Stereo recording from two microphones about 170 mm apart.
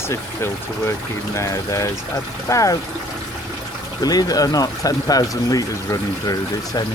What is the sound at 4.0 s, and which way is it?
Speech, 20° left (ahead or behind).